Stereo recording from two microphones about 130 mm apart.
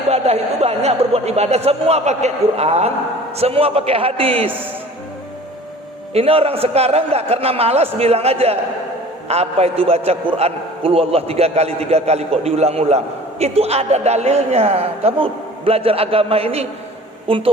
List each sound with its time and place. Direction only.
0.1 s a man's voice: 55° right (ahead or behind)
6.1 s a man's voice: 50° right (ahead or behind)